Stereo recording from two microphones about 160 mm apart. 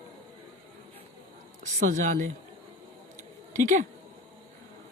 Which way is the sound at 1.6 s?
50° right (ahead or behind).